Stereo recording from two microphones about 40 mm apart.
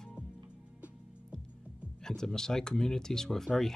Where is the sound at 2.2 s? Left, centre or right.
Centre.